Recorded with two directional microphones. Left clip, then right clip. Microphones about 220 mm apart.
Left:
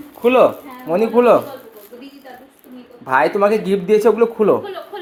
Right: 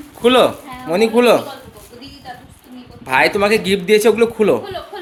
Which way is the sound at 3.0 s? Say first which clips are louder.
Even; 10° right (ahead or behind).